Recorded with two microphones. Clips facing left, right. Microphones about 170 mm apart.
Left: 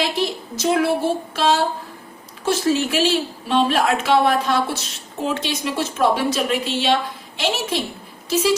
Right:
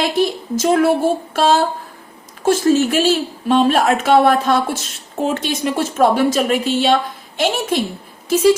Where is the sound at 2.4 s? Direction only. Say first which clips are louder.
Right 5 dB; 45° right (ahead or behind).